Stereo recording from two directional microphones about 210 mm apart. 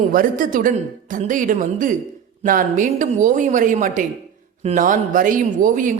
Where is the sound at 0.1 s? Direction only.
40° right (ahead or behind).